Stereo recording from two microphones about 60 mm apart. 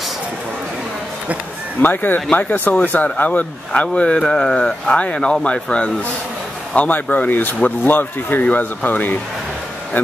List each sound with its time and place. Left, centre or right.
1.8 s speech: left